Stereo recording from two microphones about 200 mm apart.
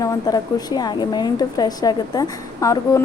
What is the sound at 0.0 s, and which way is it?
A woman's voice, 20° left (ahead or behind).